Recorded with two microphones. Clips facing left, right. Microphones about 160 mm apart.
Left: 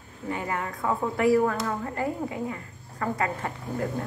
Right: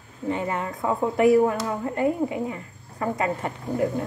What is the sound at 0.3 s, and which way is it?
A woman's voice, 25° right (ahead or behind).